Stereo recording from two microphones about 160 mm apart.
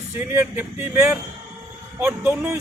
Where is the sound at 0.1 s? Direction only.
15° right (ahead or behind).